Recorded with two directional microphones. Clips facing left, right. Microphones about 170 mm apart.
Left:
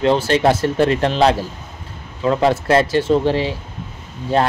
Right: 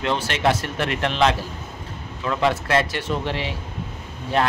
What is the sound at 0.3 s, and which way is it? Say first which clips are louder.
Speech: left 7 dB; 30° left (ahead or behind).